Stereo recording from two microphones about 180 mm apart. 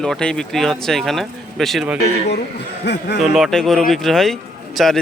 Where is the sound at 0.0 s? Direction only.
5° left (ahead or behind).